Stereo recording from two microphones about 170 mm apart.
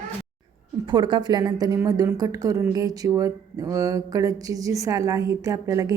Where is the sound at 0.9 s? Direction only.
25° right (ahead or behind).